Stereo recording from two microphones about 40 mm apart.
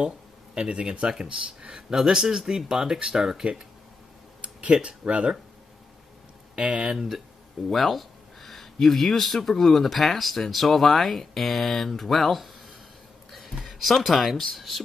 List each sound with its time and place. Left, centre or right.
0.6 s speech: right
4.4 s speech: right
6.5 s speech: right
7.7 s speech: centre
13.3 s a sound: centre
13.7 s music: centre
13.9 s speech: centre